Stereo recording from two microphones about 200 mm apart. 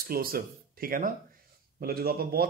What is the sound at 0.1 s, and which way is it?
Speech, 50° right (ahead or behind).